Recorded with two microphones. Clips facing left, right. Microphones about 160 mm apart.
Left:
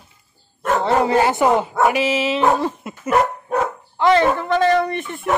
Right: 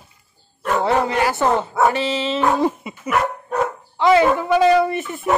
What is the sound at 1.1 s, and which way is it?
Speech, 25° left (ahead or behind).